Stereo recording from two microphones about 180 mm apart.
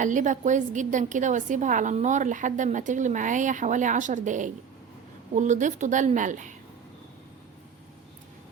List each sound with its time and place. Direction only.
0.0 s a woman's voice: 45° right (ahead or behind)